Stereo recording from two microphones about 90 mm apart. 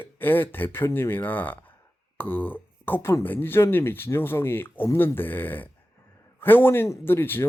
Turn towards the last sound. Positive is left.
turn(degrees=25)  # may be behind; listen again after turning